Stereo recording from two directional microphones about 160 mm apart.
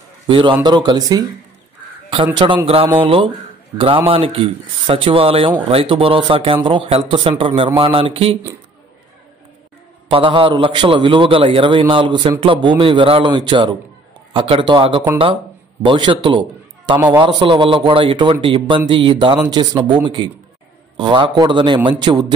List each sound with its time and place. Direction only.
0.3 s a man's voice: 30° right (ahead or behind)
2.3 s a man's voice: 30° right (ahead or behind)
10.0 s a man's voice: 30° right (ahead or behind)